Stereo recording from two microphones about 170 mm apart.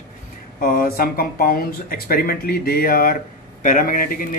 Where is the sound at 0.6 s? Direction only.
55° left (ahead or behind).